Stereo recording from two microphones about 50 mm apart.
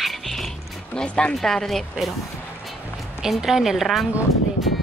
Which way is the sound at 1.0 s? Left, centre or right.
Centre.